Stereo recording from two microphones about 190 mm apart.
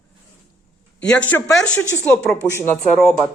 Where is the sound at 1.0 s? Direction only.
5° left (ahead or behind).